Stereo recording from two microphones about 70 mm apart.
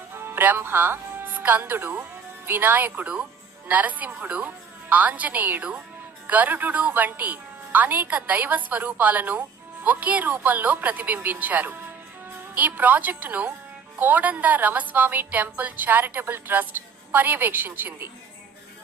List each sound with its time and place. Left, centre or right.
0.1 s music: right
2.5 s a woman's voice: right